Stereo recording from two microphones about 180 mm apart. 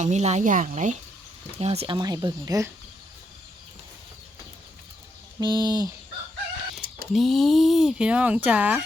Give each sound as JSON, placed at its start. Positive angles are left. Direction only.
{"t": 0.0, "sound": "speech", "side_deg": -40}
{"t": 2.0, "sound": "speech", "side_deg": -20}
{"t": 5.4, "sound": "speech", "side_deg": -25}
{"t": 7.1, "sound": "speech", "side_deg": 0}